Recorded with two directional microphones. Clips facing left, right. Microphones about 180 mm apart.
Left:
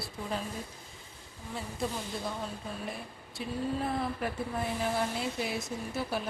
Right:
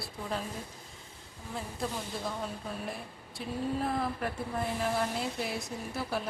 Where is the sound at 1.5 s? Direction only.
Centre (ahead or behind).